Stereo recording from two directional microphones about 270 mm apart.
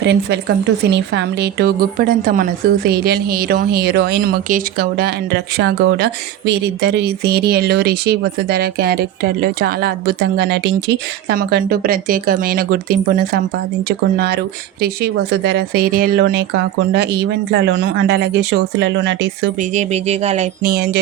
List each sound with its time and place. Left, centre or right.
0.0 s a woman's voice: right
14.8 s a woman's voice: right
17.5 s a woman's voice: right
19.7 s speech: right